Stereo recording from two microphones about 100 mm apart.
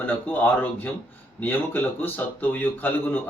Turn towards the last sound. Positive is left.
turn(degrees=15)  # may be behind; listen again after turning